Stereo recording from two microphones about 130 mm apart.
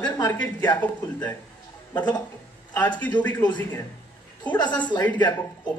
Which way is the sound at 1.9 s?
35° left (ahead or behind).